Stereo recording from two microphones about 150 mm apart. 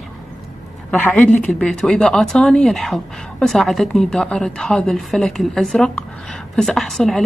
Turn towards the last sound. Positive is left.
turn(degrees=0)  # may be behind; listen again after turning